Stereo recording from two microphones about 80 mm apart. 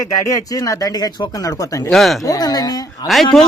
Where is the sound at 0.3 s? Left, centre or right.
Left.